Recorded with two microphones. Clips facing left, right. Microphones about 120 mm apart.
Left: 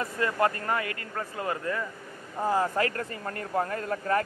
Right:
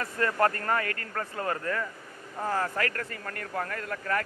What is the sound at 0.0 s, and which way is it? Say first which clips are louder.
A man's voice: even; 15° left (ahead or behind).